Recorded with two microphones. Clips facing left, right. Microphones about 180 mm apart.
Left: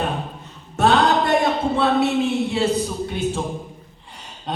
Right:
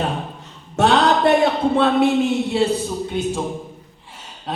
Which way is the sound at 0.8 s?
70° right (ahead or behind).